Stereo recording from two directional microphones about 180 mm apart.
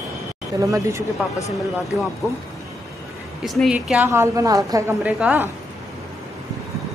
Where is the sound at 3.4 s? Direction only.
Centre (ahead or behind).